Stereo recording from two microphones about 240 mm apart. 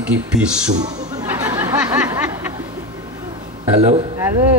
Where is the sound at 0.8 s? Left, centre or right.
Centre.